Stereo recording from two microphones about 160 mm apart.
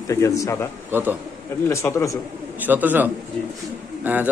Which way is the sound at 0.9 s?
15° right (ahead or behind).